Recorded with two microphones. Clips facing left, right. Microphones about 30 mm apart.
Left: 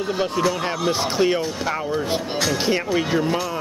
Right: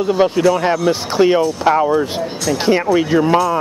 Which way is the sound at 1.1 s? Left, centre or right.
Centre.